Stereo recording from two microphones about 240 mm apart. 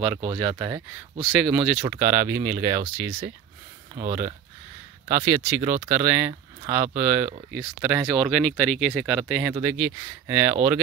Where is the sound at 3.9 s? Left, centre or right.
Right.